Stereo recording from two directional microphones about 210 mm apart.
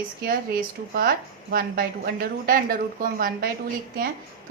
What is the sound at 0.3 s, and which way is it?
A woman's voice, 45° right (ahead or behind).